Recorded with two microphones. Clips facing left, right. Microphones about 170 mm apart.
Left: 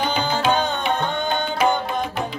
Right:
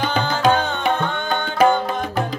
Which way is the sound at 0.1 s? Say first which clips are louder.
Right 2 dB; 45° right (ahead or behind).